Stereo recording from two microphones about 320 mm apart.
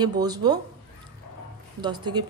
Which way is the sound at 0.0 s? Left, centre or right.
Centre.